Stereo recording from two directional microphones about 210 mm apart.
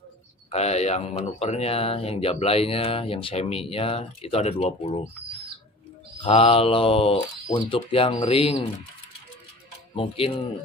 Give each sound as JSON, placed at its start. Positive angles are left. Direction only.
{"t": 0.5, "sound": "speech", "side_deg": 30}
{"t": 6.1, "sound": "speech", "side_deg": 25}
{"t": 9.9, "sound": "speech", "side_deg": 25}